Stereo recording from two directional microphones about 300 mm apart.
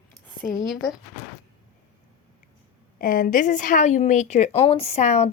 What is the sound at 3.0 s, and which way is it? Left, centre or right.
A woman's voice, left.